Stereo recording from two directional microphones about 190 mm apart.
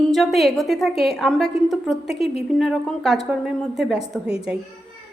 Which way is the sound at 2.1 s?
30° left (ahead or behind).